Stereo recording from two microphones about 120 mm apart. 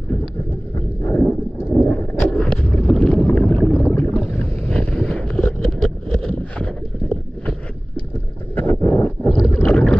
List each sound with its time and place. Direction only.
0.7 s vehicle: 20° left (ahead or behind)
6.6 s boat: 10° left (ahead or behind)
8.5 s a sound: 15° left (ahead or behind)
9.5 s boat: 15° left (ahead or behind)